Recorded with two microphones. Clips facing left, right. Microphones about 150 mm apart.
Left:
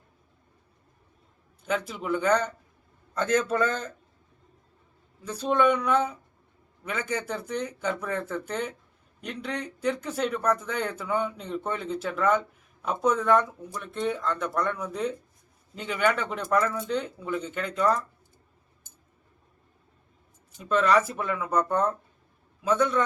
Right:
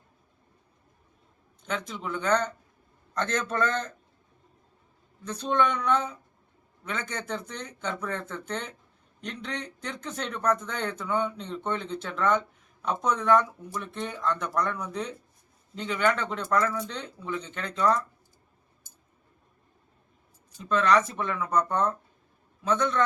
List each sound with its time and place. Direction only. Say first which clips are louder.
1.6 s speech: left 4 dB; 5° left (ahead or behind)
5.2 s speech: left 3 dB; 10° left (ahead or behind)
20.6 s speech: left 1 dB; 5° left (ahead or behind)